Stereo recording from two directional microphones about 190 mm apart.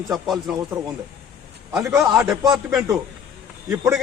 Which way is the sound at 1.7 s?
15° right (ahead or behind).